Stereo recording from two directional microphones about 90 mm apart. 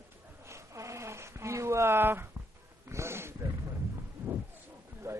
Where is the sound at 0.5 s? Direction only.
35° right (ahead or behind).